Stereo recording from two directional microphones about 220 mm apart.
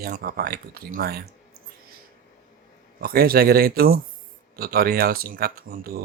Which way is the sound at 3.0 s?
45° right (ahead or behind).